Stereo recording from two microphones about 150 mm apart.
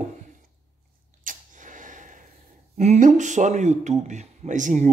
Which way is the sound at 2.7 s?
50° right (ahead or behind).